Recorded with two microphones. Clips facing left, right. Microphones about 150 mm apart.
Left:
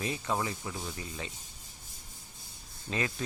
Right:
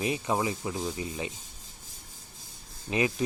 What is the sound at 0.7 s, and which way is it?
Speech, 30° right (ahead or behind).